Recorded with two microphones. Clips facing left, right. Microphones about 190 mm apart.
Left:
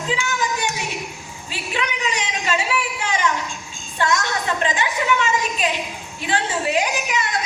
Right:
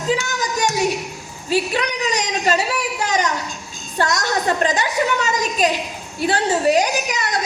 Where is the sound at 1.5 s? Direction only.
40° right (ahead or behind).